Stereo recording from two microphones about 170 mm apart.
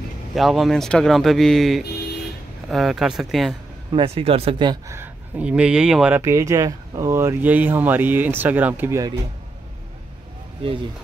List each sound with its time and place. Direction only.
0.3 s speech: centre (ahead or behind)
3.9 s speech: 35° right (ahead or behind)
4.9 s speech: 10° right (ahead or behind)
10.6 s speech: 30° right (ahead or behind)